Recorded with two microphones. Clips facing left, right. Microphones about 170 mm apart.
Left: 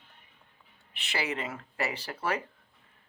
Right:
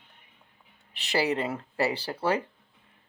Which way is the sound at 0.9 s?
35° right (ahead or behind).